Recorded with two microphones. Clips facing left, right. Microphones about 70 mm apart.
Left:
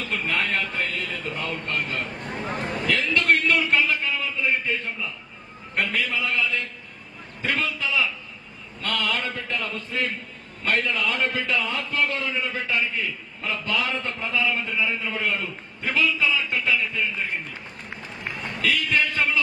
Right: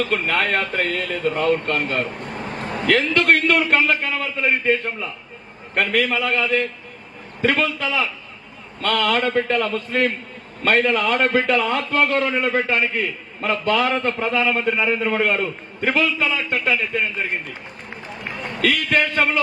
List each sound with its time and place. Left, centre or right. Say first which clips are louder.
0.1 s a man's voice: right 5 dB; right
18.6 s a man's voice: right 4 dB; right